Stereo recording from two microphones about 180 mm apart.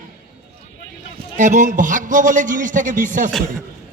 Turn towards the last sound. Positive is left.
turn(degrees=-45)  # may be behind; listen again after turning